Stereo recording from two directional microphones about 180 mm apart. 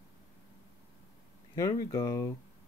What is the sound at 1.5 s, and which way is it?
Speech, 15° left (ahead or behind).